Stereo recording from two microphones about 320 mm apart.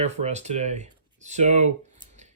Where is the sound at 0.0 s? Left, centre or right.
Right.